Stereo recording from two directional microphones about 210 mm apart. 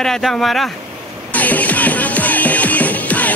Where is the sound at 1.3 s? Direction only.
5° left (ahead or behind).